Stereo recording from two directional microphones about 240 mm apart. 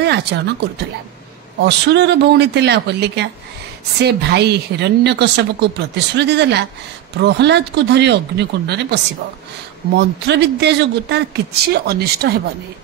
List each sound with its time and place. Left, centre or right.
0.0 s speech: right